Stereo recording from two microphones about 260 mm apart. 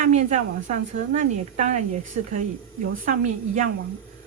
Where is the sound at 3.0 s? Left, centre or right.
Right.